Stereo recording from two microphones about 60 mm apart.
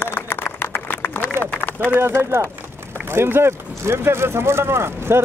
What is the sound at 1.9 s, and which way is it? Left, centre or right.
Speech, right.